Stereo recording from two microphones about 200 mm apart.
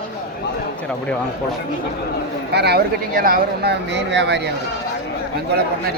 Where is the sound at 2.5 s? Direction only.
55° right (ahead or behind).